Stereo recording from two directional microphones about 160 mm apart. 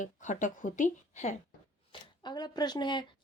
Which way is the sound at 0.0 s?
50° left (ahead or behind).